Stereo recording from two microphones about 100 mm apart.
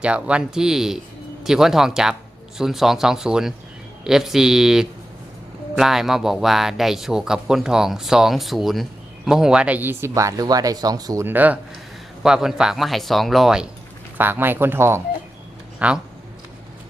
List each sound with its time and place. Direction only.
0.0 s speech: 10° right (ahead or behind); by 11.2 s 40° right (ahead or behind)
11.2 s speech: 20° right (ahead or behind)
12.2 s speech: 5° right (ahead or behind)
14.2 s speech: 20° right (ahead or behind)
15.8 s speech: 15° right (ahead or behind)